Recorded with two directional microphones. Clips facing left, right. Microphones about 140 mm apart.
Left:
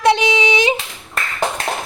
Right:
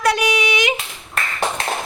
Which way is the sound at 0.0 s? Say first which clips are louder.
Left 3 dB; 25° left (ahead or behind).